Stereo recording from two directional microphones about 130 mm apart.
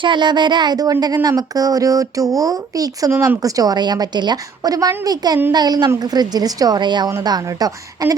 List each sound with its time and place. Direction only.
0.0 s speech: 35° right (ahead or behind)